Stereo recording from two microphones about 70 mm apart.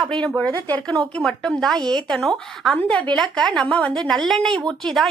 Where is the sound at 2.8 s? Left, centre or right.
Centre.